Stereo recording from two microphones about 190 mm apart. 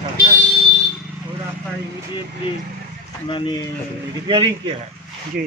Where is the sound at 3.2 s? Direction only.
25° left (ahead or behind).